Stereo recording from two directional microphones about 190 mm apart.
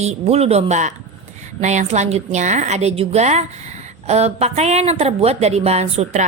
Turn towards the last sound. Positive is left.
turn(degrees=-35)  # may be behind; listen again after turning